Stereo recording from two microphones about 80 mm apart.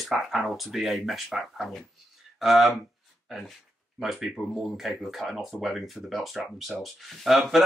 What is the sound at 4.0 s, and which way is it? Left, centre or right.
Speech, centre.